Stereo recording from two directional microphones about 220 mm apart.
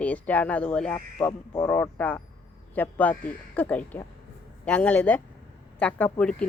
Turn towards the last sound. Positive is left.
turn(degrees=5)  # may be behind; listen again after turning